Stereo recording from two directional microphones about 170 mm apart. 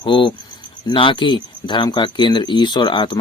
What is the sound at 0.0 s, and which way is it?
Speech, 30° left (ahead or behind).